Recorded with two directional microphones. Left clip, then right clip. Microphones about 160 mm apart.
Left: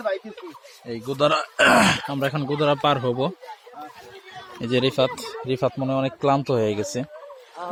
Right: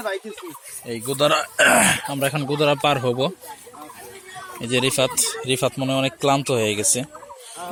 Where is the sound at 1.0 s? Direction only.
Centre (ahead or behind).